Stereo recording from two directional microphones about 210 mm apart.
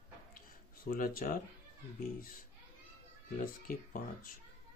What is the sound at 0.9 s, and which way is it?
Speech, 40° left (ahead or behind).